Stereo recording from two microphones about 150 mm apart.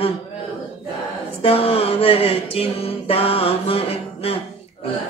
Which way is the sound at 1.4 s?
40° left (ahead or behind).